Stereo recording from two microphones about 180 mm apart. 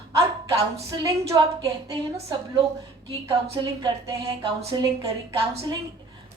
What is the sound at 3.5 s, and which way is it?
A woman's voice, 25° right (ahead or behind).